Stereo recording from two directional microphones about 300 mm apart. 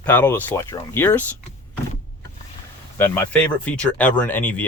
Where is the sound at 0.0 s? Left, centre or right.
Centre.